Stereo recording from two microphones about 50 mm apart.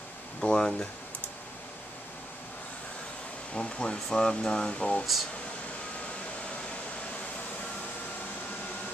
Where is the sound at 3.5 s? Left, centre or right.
Centre.